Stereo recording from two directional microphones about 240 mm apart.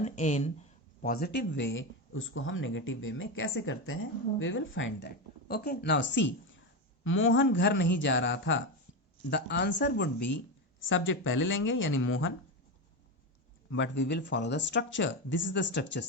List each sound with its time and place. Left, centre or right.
0.0 s speech: left
13.7 s speech: left